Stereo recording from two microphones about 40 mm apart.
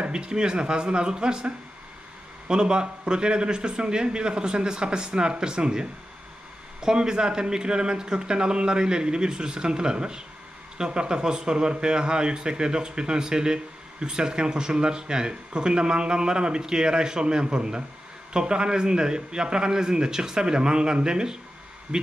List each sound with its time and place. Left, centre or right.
0.0 s speech: right